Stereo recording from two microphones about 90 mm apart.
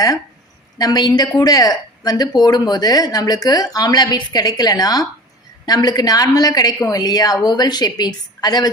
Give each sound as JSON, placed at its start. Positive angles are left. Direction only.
{"t": 0.8, "sound": "speech", "side_deg": 45}